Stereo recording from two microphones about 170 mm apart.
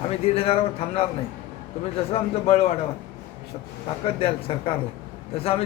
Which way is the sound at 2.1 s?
35° left (ahead or behind).